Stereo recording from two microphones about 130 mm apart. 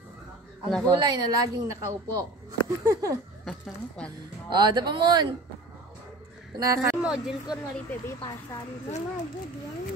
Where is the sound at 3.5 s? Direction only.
5° left (ahead or behind).